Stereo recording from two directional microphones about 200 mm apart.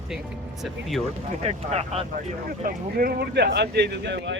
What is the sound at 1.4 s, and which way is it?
Speech, 30° right (ahead or behind).